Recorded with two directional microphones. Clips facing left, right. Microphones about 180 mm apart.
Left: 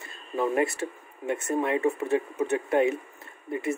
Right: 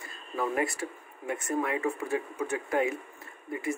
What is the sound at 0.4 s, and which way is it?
Speech, 25° left (ahead or behind).